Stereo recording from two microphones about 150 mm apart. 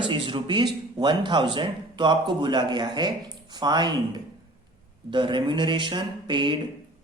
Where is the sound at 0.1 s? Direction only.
35° right (ahead or behind).